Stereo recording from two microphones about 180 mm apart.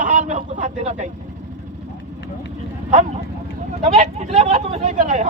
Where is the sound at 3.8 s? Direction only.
40° right (ahead or behind).